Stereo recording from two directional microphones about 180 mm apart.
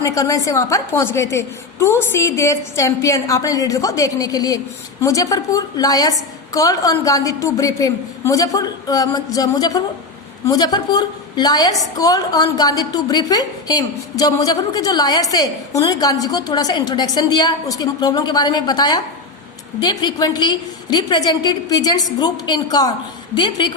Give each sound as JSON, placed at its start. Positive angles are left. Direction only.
{"t": 0.0, "sound": "a woman's voice", "side_deg": 20}